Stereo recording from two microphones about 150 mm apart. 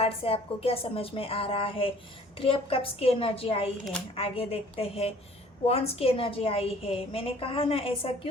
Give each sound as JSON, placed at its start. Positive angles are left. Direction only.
{"t": 0.0, "sound": "a woman's voice", "side_deg": 40}